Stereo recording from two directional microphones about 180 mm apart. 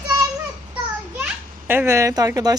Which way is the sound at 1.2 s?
10° right (ahead or behind).